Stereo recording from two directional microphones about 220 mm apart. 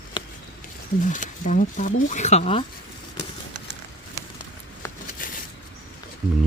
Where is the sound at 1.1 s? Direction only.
35° left (ahead or behind).